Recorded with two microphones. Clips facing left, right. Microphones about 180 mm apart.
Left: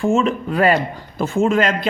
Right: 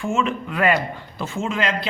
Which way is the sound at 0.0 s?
35° left (ahead or behind).